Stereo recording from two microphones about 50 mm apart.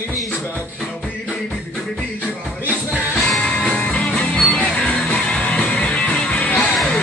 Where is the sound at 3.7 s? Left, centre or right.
Left.